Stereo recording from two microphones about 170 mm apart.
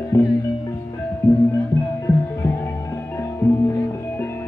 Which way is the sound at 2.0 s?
15° left (ahead or behind).